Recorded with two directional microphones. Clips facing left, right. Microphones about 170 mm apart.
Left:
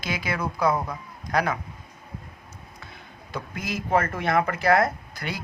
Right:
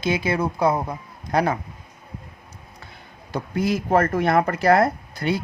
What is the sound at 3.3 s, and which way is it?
Speech, 35° right (ahead or behind).